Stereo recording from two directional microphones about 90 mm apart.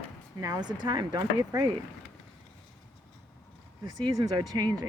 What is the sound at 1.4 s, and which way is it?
Speech, 40° right (ahead or behind).